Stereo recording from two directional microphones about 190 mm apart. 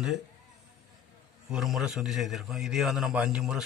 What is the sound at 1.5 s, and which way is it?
A man's voice, centre (ahead or behind).